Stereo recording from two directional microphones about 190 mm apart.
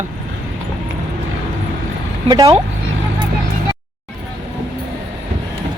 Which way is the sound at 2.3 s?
20° right (ahead or behind).